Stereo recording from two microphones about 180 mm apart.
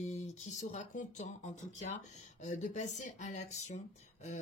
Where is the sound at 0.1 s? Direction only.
40° left (ahead or behind).